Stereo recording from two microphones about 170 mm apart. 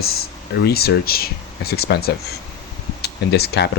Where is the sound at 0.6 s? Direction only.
65° left (ahead or behind).